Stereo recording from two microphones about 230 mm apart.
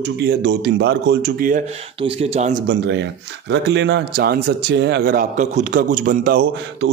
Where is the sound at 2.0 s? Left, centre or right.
Right.